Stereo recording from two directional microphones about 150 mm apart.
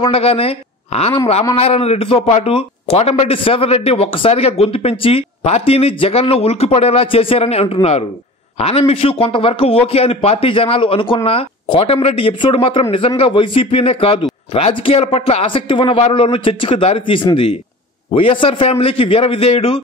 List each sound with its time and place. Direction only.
0.0 s a man's voice: 40° left (ahead or behind)